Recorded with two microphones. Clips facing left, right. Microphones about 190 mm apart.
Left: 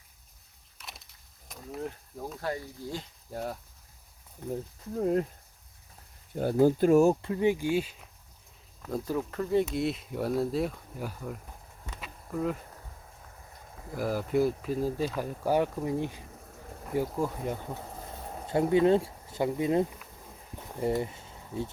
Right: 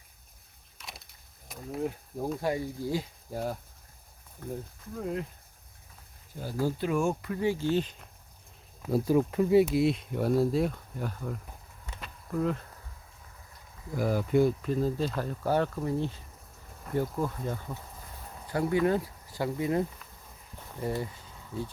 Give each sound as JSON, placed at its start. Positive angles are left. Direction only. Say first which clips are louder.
{"t": 0.8, "sound": "a sound", "louder": "right 1 dB", "side_deg": 0}
{"t": 2.4, "sound": "speech", "louder": "right 1 dB", "side_deg": -10}
{"t": 4.9, "sound": "speech", "louder": "left 7 dB", "side_deg": 40}
{"t": 6.7, "sound": "speech", "louder": "left 6 dB", "side_deg": 45}
{"t": 8.8, "sound": "speech", "louder": "right 6 dB", "side_deg": -10}
{"t": 11.9, "sound": "insect", "louder": "right 2 dB", "side_deg": 5}
{"t": 13.9, "sound": "speech", "louder": "right 2 dB", "side_deg": 0}
{"t": 20.8, "sound": "speech", "louder": "left 4 dB", "side_deg": 20}